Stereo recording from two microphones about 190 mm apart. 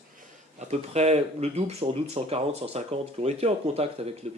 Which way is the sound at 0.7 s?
35° right (ahead or behind).